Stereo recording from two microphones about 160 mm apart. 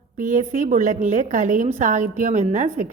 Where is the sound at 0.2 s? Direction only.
55° right (ahead or behind).